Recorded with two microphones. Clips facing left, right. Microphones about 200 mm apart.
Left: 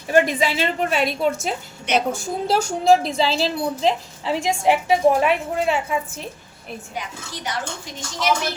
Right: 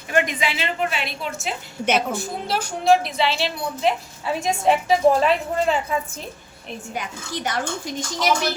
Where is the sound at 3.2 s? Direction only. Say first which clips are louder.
Left 3 dB; 35° left (ahead or behind).